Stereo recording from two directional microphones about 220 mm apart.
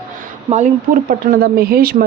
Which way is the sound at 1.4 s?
45° right (ahead or behind).